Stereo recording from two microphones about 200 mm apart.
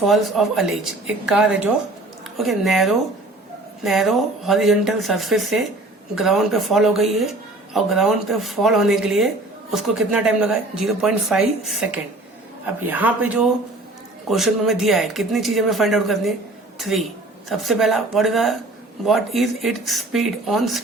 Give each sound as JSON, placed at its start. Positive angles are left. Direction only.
{"t": 0.0, "sound": "a woman's voice", "side_deg": 0}